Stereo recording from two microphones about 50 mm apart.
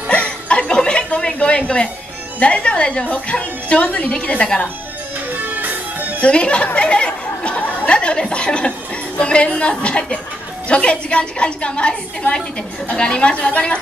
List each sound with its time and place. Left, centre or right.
0.1 s chuckle: left
2.4 s speech: left
5.4 s music: right
6.2 s a sound: left
7.6 s speech: left